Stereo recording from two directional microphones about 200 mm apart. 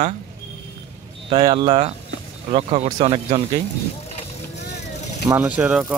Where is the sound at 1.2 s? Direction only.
25° right (ahead or behind).